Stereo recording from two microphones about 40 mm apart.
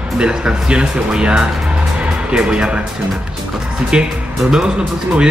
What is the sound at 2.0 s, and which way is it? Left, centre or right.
Music, right.